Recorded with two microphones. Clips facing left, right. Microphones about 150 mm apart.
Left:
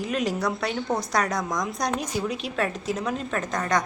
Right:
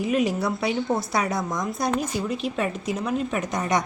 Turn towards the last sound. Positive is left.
turn(degrees=-20)  # may be behind; listen again after turning